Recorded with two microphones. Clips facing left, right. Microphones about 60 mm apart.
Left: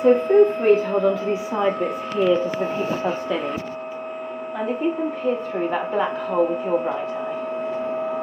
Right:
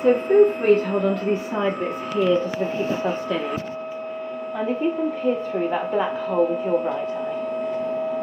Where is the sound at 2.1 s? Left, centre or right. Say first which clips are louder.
Left 1 dB; centre.